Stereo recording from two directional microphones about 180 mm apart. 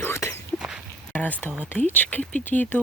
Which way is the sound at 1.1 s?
10° left (ahead or behind).